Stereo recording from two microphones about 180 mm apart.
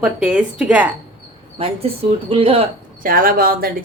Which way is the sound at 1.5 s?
30° right (ahead or behind).